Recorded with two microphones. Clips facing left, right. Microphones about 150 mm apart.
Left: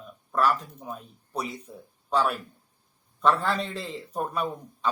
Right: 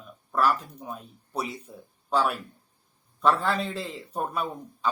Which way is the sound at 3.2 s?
5° right (ahead or behind).